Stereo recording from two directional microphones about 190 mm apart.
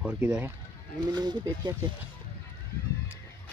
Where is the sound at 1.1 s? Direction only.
20° right (ahead or behind).